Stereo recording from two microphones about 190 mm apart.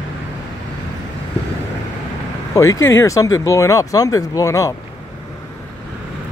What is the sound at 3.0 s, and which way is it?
Speech, 15° left (ahead or behind).